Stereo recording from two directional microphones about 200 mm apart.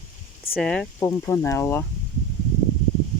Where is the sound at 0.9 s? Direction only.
15° left (ahead or behind).